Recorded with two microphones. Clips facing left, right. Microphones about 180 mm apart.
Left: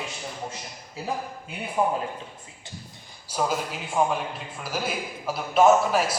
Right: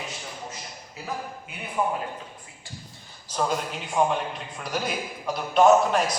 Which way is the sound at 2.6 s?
20° left (ahead or behind).